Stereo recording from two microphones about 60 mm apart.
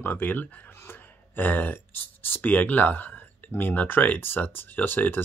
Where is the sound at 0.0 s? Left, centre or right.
Left.